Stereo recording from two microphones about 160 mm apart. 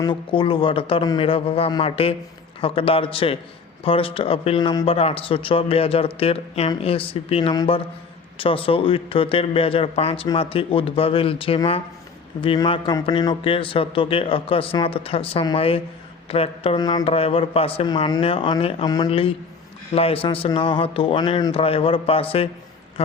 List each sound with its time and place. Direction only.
0.0 s a man's voice: 30° left (ahead or behind)
7.5 s a man's voice: 25° left (ahead or behind)
18.9 s a man's voice: 25° left (ahead or behind)